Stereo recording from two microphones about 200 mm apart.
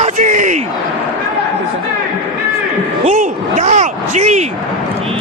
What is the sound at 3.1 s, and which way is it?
Speech, 35° right (ahead or behind).